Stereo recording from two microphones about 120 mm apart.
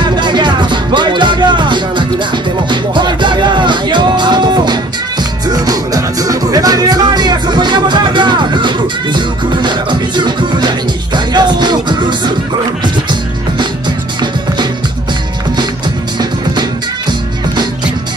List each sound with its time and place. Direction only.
0.1 s music: 40° right (ahead or behind)